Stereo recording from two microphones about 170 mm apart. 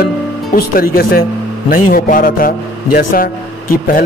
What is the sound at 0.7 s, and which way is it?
A man's voice, 60° left (ahead or behind).